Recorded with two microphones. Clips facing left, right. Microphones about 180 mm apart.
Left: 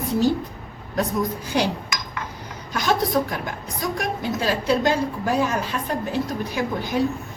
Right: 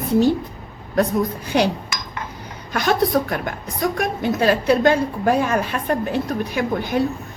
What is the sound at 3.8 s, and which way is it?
A woman's voice, 60° right (ahead or behind).